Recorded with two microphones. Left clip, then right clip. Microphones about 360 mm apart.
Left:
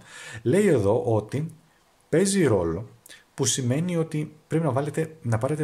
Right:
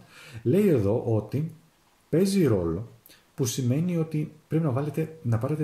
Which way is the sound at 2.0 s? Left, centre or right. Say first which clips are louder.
Left 2 dB; centre.